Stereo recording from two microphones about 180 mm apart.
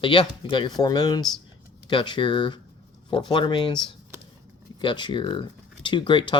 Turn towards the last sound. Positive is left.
turn(degrees=25)  # may be behind; listen again after turning